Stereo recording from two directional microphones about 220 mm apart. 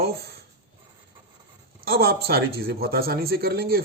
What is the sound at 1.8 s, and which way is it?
Speech, 45° right (ahead or behind).